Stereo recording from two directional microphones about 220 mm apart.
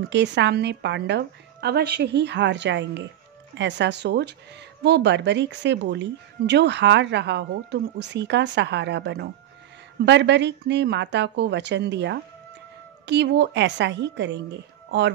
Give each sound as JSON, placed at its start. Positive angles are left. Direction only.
{"t": 0.1, "sound": "speech", "side_deg": -55}